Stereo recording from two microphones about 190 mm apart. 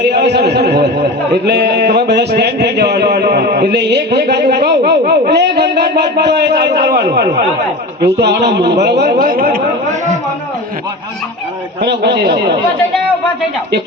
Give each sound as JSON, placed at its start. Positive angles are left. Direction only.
{"t": 0.0, "sound": "a man's voice", "side_deg": -60}
{"t": 11.8, "sound": "a man's voice", "side_deg": -60}